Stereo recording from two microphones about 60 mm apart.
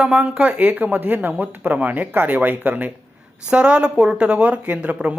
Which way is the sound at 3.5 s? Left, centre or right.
Centre.